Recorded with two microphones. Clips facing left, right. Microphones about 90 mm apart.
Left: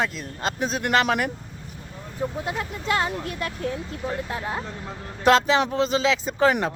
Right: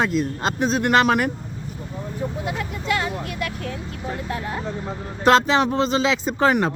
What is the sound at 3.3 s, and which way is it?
Speech, 30° left (ahead or behind).